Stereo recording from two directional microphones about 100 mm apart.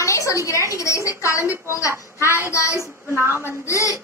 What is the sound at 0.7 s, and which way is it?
Speech, 30° left (ahead or behind).